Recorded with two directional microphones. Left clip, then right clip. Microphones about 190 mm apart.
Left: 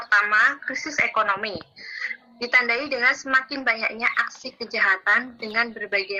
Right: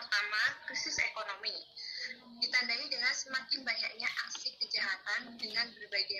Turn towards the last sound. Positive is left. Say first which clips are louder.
# left 11 dB
turn(degrees=45)  # may be behind; listen again after turning